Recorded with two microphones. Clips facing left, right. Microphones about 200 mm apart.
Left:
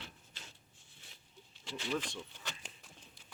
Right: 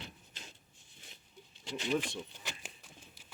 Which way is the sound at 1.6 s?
15° right (ahead or behind).